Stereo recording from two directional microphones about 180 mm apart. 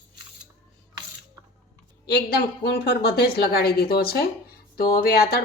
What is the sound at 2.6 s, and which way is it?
Speech, 65° left (ahead or behind).